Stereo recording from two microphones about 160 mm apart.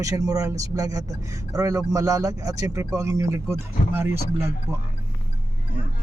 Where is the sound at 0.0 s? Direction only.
20° right (ahead or behind).